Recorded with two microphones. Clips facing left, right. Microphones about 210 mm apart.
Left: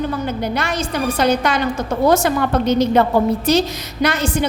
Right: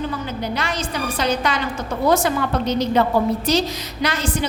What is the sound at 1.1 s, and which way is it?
A woman's voice, 45° left (ahead or behind).